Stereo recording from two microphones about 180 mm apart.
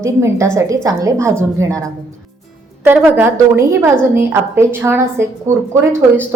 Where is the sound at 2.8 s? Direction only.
10° right (ahead or behind).